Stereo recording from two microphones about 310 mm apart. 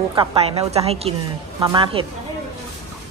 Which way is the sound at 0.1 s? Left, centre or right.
Centre.